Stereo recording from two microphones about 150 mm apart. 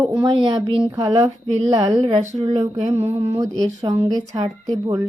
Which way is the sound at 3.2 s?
20° right (ahead or behind).